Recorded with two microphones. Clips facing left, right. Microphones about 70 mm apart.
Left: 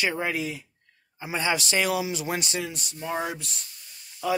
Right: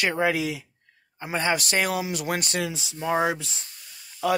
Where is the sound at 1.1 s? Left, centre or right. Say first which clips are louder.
Right 2 dB; right.